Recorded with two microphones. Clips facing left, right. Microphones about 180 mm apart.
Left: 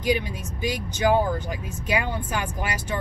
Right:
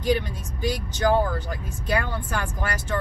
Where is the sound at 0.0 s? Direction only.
15° left (ahead or behind).